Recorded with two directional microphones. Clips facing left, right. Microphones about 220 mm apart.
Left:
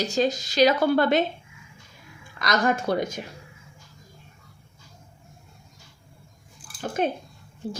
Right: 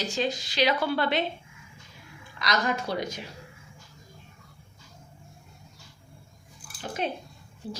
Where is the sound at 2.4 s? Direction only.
50° left (ahead or behind).